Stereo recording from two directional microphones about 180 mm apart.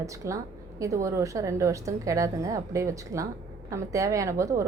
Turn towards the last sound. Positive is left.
turn(degrees=-15)  # may be behind; listen again after turning